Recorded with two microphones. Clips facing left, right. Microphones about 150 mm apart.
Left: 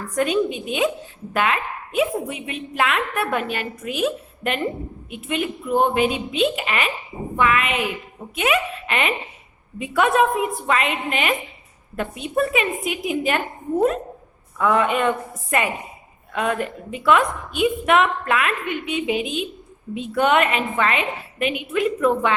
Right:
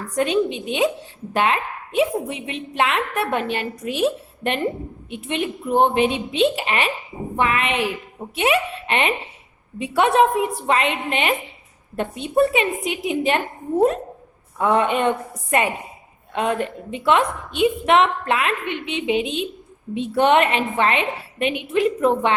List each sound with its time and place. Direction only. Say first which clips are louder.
0.2 s a woman's voice: right 1 dB; 25° right (ahead or behind)
14.6 s a woman's voice: right 1 dB; 30° right (ahead or behind)